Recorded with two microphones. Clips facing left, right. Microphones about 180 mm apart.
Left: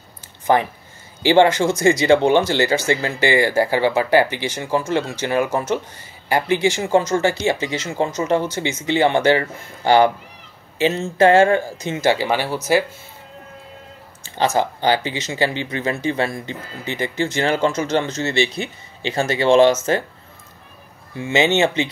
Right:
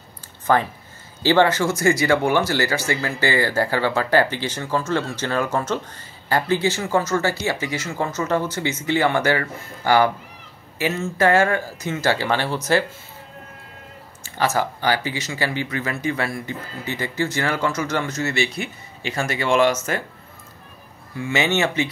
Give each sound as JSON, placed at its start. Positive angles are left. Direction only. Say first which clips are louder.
{"t": 0.5, "sound": "speech", "louder": "left 2 dB", "side_deg": 20}
{"t": 14.2, "sound": "speech", "louder": "left 3 dB", "side_deg": 20}
{"t": 21.2, "sound": "speech", "louder": "left 4 dB", "side_deg": 20}